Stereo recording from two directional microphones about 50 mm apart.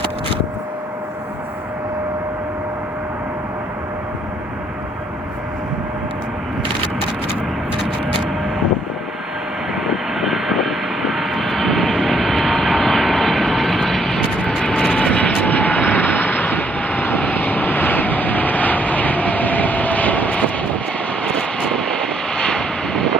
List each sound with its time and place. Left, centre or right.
9.7 s vehicle: centre
14.3 s vehicle: left
21.2 s vehicle: centre